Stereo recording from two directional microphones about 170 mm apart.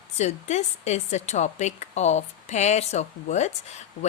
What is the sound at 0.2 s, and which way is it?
A woman's voice, 40° left (ahead or behind).